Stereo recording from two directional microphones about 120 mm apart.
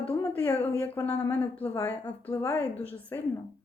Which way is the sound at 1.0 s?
10° left (ahead or behind).